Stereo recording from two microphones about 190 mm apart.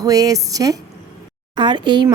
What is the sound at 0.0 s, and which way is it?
Speech, 20° right (ahead or behind).